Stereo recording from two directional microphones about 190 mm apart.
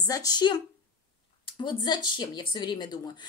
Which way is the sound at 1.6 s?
25° left (ahead or behind).